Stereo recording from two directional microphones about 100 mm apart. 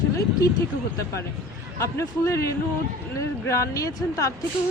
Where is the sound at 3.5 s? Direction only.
30° left (ahead or behind).